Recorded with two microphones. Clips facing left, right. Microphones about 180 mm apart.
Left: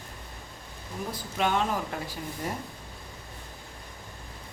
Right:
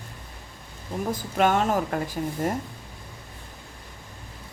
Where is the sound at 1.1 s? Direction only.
45° right (ahead or behind).